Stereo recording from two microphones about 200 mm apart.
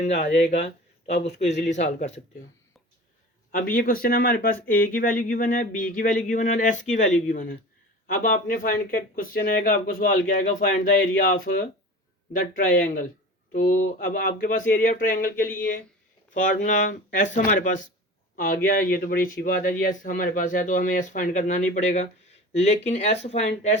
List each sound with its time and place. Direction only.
0.0 s speech: 35° left (ahead or behind)
3.5 s speech: 45° left (ahead or behind)
12.3 s speech: 45° left (ahead or behind)